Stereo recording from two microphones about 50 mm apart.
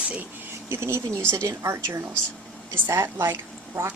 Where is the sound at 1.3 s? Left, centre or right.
Right.